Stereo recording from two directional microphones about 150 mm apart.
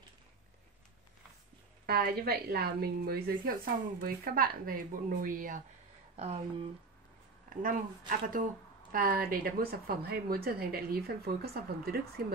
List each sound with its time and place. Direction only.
1.9 s a woman's voice: 90° right
4.0 s speech: 75° right (ahead or behind)
6.1 s speech: 45° right (ahead or behind)
8.1 s speech: 60° right (ahead or behind)
8.9 s a woman's voice: 75° right (ahead or behind)